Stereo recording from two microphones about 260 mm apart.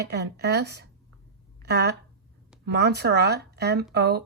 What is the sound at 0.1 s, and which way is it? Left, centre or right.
A woman's voice, right.